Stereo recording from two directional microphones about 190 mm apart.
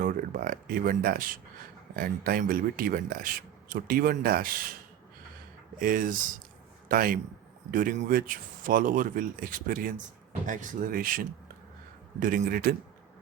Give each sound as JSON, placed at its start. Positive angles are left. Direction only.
{"t": 0.0, "sound": "speech", "side_deg": -45}
{"t": 5.8, "sound": "speech", "side_deg": -45}